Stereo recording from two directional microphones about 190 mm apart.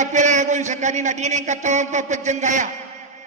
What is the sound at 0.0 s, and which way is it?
A man's voice, 40° right (ahead or behind).